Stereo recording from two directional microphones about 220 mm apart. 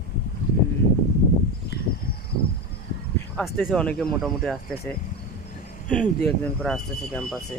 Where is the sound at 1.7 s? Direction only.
50° left (ahead or behind).